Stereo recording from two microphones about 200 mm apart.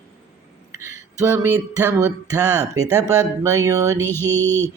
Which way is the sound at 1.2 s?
10° right (ahead or behind).